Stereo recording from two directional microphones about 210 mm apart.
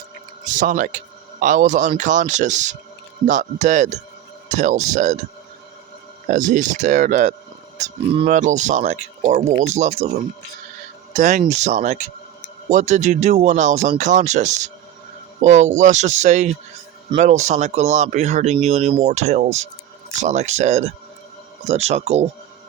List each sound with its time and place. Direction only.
0.4 s speech: 40° right (ahead or behind)
6.2 s speech: 35° right (ahead or behind)
11.1 s speech: 35° right (ahead or behind)